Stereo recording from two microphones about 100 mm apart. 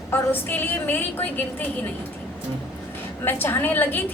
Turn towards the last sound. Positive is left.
turn(degrees=20)  # may be behind; listen again after turning